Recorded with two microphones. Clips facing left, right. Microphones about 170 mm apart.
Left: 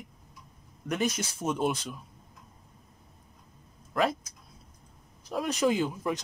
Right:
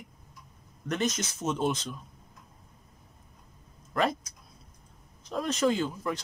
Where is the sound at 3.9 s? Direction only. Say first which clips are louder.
Even; centre (ahead or behind).